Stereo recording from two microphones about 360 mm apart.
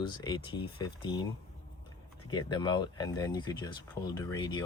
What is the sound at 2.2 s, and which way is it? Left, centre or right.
Speech, centre.